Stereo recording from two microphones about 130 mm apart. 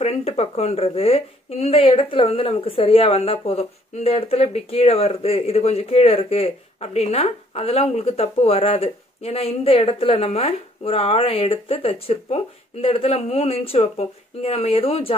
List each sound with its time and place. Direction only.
0.0 s speech: 55° left (ahead or behind)
6.8 s speech: 65° left (ahead or behind); by 15.1 s 45° left (ahead or behind)